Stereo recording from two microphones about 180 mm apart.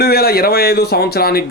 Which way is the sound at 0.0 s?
60° left (ahead or behind).